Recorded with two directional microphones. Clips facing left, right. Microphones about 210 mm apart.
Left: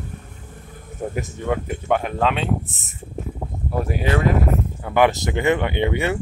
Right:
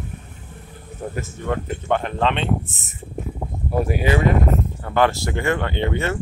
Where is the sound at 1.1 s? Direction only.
15° left (ahead or behind); by 4.3 s 5° right (ahead or behind).